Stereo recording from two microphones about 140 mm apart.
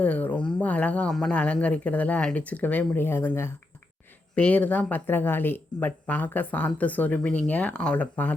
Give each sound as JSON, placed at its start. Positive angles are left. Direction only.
{"t": 0.0, "sound": "speech", "side_deg": 10}